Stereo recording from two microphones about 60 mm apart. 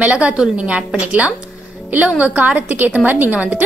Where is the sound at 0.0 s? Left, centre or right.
Right.